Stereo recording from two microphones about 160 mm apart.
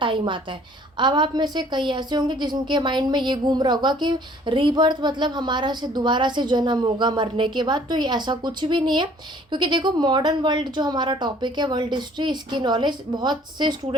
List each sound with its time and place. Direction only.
0.0 s a woman's voice: 30° right (ahead or behind)